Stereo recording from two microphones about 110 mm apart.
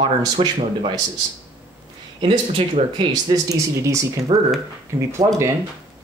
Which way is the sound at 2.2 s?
50° right (ahead or behind).